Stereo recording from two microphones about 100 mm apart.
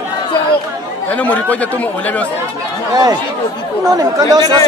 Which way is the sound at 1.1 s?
15° left (ahead or behind).